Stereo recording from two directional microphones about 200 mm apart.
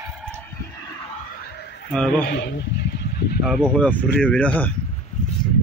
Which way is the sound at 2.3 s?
60° left (ahead or behind).